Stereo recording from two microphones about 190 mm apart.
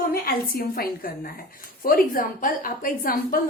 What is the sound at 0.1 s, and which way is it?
A woman's voice, 50° left (ahead or behind).